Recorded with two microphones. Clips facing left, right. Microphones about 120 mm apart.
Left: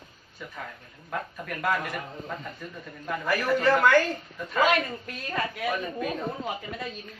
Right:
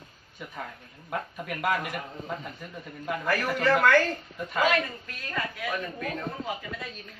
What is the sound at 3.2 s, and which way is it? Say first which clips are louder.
Speech: left 2 dB; 15° left (ahead or behind).